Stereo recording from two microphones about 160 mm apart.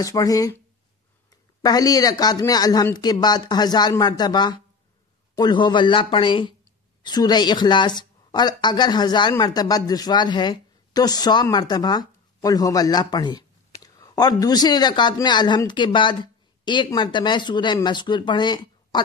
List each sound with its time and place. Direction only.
0.0 s speech: 20° left (ahead or behind)
1.6 s speech: 25° left (ahead or behind)